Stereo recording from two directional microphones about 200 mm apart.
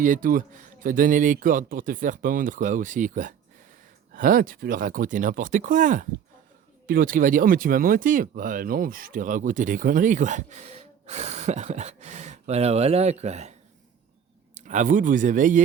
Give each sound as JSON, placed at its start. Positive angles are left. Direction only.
{"t": 0.0, "sound": "speech", "side_deg": -40}